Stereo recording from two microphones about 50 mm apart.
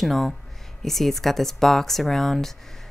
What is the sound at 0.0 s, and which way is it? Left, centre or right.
Speech, centre.